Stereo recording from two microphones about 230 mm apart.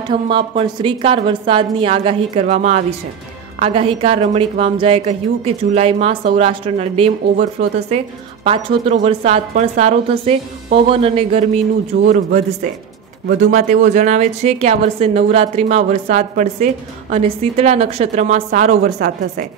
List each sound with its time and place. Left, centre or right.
0.1 s speech: right
11.9 s speech: right